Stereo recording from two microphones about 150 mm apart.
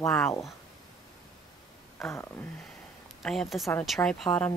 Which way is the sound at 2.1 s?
15° left (ahead or behind).